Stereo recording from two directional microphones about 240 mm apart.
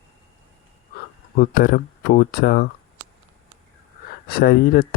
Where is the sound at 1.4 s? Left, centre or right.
Left.